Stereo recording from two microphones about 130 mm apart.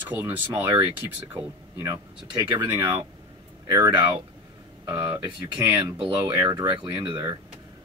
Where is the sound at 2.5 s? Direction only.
20° right (ahead or behind).